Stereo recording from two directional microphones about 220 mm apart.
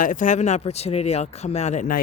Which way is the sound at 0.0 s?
35° left (ahead or behind).